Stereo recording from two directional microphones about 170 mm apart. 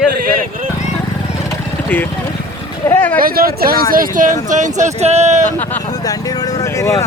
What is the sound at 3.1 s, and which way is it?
A man's voice, 60° right (ahead or behind).